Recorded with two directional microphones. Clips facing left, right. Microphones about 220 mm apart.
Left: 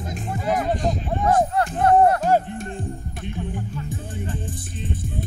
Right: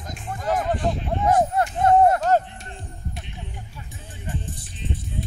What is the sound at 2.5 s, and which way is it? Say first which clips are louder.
Music: left 10 dB; 50° left (ahead or behind).